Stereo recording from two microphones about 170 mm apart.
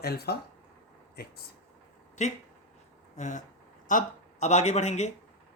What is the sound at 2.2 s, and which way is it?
Speech, 40° left (ahead or behind).